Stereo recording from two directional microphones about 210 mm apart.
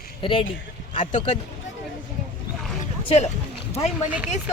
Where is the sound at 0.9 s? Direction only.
35° left (ahead or behind).